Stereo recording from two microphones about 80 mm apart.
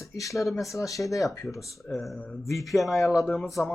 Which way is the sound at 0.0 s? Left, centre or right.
Left.